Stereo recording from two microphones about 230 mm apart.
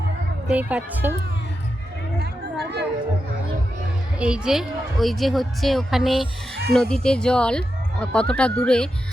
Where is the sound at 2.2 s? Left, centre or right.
Right.